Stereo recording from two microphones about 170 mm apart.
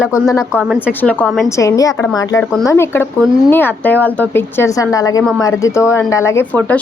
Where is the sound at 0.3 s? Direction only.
15° left (ahead or behind).